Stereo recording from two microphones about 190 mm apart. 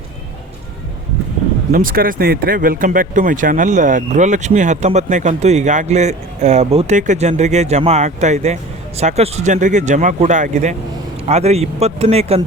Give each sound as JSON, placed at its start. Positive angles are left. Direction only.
{"t": 1.7, "sound": "speech", "side_deg": -50}